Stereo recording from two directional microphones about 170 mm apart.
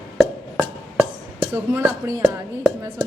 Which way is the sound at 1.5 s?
15° right (ahead or behind).